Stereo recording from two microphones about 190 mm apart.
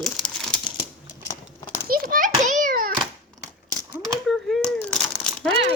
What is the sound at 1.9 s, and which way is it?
Children playing, 45° right (ahead or behind).